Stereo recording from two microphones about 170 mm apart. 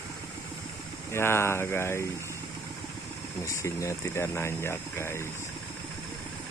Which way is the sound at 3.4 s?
20° left (ahead or behind).